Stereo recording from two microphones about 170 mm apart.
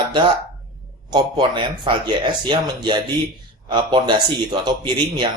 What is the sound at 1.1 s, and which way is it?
Speech, 25° right (ahead or behind).